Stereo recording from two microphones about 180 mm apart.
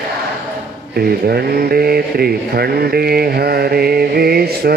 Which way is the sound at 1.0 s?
60° right (ahead or behind).